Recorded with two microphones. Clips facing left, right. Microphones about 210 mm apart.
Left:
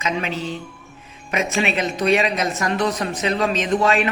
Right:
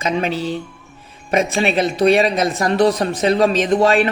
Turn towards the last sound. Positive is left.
turn(degrees=-35)  # may be behind; listen again after turning